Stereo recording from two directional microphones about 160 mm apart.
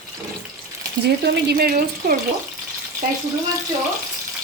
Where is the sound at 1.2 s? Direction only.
90° right; by 2.1 s 70° right (ahead or behind).